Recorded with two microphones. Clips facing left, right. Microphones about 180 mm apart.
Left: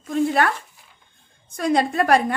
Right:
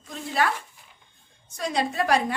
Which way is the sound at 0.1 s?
55° left (ahead or behind).